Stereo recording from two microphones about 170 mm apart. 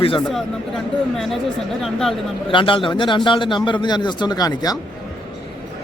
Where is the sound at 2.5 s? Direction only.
30° left (ahead or behind).